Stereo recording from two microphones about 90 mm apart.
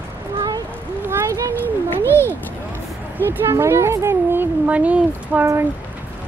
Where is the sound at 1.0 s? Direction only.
25° right (ahead or behind).